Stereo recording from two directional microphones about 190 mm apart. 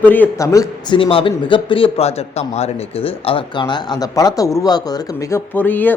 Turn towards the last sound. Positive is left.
turn(degrees=10)  # may be behind; listen again after turning